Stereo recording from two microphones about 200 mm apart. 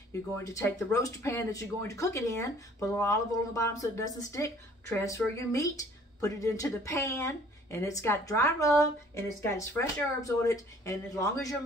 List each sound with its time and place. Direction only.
0.4 s speech: 15° left (ahead or behind)